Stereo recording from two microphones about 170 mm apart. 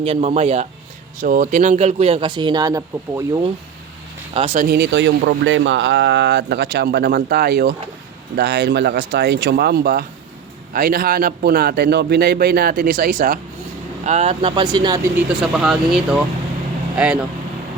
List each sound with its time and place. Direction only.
0.0 s speech: 35° right (ahead or behind)
1.2 s speech: 50° right (ahead or behind); by 3.5 s 20° right (ahead or behind)
4.4 s speech: 35° right (ahead or behind)
4.6 s speech: 75° right (ahead or behind)
8.4 s a man's voice: 80° right; by 13.4 s 55° right (ahead or behind)
14.0 s speech: 40° right (ahead or behind)
15.3 s speech: 5° right (ahead or behind)